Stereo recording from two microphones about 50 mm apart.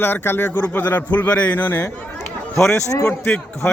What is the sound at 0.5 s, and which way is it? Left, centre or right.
A man's voice, left.